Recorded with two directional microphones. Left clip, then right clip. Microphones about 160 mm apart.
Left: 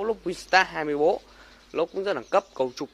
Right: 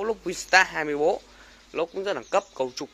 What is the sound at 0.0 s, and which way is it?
Speech, 15° left (ahead or behind).